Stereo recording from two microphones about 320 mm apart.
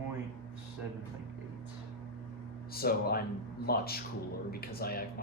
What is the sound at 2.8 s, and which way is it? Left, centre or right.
Speech, left.